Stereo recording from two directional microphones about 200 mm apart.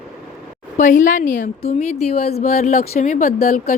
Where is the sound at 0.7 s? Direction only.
40° left (ahead or behind).